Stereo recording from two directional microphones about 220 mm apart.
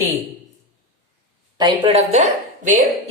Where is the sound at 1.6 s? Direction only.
25° right (ahead or behind).